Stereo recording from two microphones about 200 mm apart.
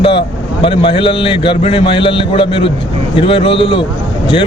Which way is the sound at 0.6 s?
25° left (ahead or behind).